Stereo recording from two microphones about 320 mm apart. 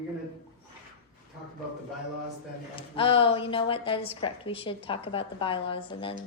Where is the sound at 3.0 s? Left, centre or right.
Centre.